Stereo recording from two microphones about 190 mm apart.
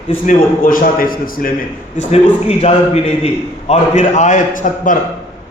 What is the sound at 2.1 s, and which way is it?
A man's voice, 30° left (ahead or behind).